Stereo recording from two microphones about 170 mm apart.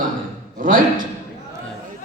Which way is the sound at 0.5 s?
55° right (ahead or behind).